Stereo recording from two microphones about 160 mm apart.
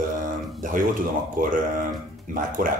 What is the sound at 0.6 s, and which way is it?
Speech, 55° right (ahead or behind).